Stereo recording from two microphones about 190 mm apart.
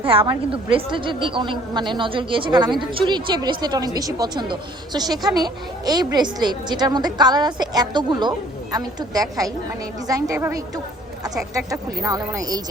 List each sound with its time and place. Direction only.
0.1 s a woman's voice: 30° right (ahead or behind)